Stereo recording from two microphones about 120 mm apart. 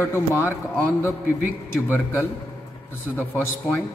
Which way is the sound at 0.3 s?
15° right (ahead or behind).